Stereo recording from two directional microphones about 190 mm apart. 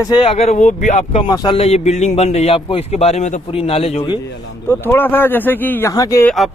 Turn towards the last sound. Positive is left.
turn(degrees=15)  # may be behind; listen again after turning